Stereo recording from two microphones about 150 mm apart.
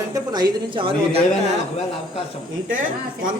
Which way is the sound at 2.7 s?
60° right (ahead or behind).